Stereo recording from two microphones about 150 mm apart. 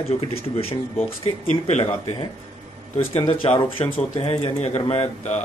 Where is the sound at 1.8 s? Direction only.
35° left (ahead or behind).